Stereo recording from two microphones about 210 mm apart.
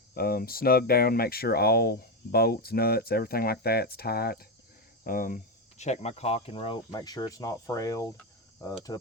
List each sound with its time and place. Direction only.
0.1 s speech: 45° left (ahead or behind); by 9.0 s 15° left (ahead or behind)